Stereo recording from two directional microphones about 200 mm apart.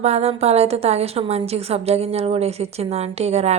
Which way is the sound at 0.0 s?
30° right (ahead or behind).